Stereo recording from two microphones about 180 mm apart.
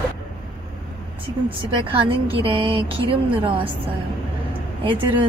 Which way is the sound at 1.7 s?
30° right (ahead or behind).